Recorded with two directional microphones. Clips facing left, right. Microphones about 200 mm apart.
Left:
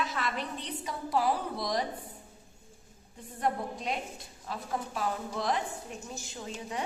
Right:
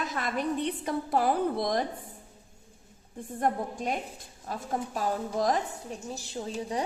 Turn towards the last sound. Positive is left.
turn(degrees=-35)  # may be behind; listen again after turning